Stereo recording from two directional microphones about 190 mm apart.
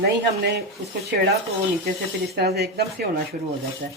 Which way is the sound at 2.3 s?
55° right (ahead or behind).